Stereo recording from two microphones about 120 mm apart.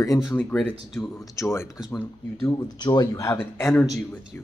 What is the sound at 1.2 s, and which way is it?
Speech, 25° left (ahead or behind).